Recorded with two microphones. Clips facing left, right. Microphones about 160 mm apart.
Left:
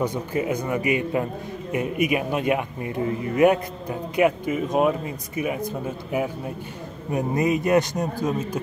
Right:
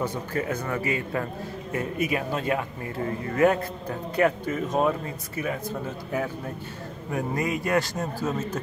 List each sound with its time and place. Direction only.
0.0 s a man's voice: 15° left (ahead or behind)